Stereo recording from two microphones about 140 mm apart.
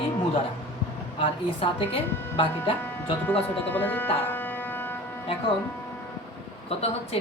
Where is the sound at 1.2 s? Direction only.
40° left (ahead or behind).